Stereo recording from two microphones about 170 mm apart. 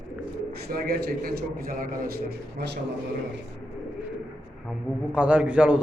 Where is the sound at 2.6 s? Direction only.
75° right (ahead or behind).